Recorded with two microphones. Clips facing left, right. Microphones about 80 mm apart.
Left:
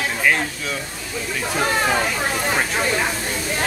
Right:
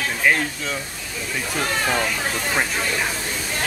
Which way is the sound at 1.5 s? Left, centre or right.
Left.